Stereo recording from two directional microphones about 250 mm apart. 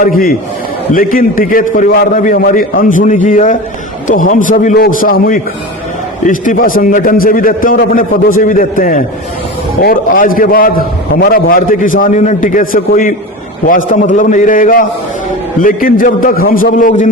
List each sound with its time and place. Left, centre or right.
0.0 s a man's voice: left